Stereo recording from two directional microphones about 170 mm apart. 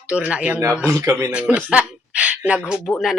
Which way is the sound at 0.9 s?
15° right (ahead or behind).